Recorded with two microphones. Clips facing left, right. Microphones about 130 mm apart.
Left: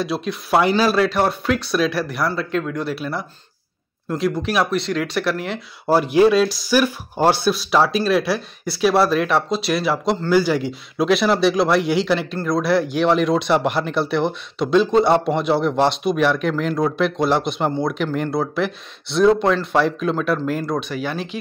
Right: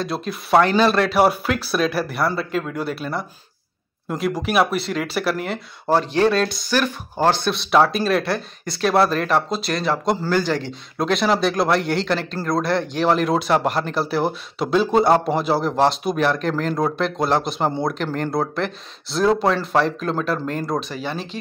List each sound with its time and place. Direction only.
0.0 s speech: centre (ahead or behind)
1.1 s speech: 10° right (ahead or behind)
5.9 s speech: 10° left (ahead or behind)